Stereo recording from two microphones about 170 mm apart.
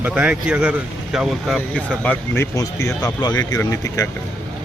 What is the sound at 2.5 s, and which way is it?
Speech, 20° left (ahead or behind).